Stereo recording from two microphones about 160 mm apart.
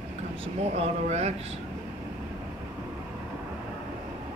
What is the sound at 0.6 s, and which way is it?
Speech, 40° right (ahead or behind).